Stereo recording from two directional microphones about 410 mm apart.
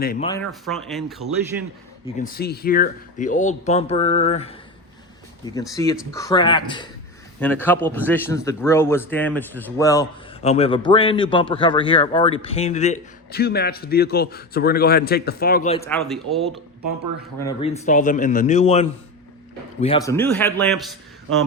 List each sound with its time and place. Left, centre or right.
0.0 s speech: left
0.3 s a man's voice: centre
2.1 s a man's voice: centre
16.0 s a man's voice: centre
17.4 s a man's voice: centre